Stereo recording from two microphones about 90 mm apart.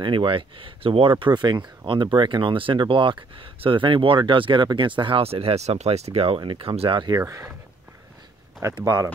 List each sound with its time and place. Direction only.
0.0 s speech: 65° right (ahead or behind); by 1.1 s 90° right
1.2 s speech: 55° right (ahead or behind); by 7.1 s 80° right
7.2 s speech: 35° right (ahead or behind)
8.8 s speech: 30° right (ahead or behind)